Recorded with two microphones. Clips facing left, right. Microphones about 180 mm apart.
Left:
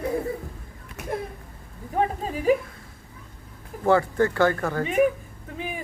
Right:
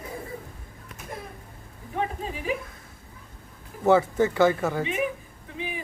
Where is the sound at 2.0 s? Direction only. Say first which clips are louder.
Left 5 dB; 40° left (ahead or behind).